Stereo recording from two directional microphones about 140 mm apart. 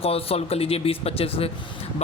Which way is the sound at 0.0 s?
45° left (ahead or behind).